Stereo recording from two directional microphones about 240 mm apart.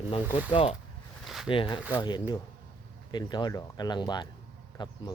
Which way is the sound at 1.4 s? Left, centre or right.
Left.